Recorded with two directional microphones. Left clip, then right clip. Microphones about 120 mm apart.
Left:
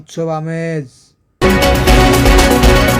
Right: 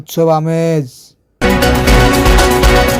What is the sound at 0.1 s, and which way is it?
Speech, 45° right (ahead or behind).